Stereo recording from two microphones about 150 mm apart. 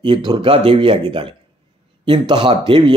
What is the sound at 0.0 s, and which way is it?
A man's voice, 30° right (ahead or behind).